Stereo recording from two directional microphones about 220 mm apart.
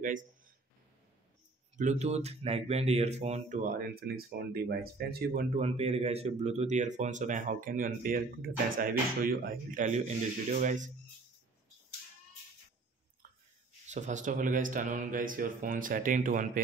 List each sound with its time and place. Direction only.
0.0 s speech: 35° right (ahead or behind)
1.8 s speech: 30° right (ahead or behind)
5.6 s speech: 30° right (ahead or behind)
13.8 s speech: 35° right (ahead or behind)